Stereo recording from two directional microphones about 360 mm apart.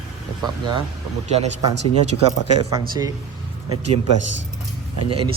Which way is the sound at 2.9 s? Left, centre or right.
Centre.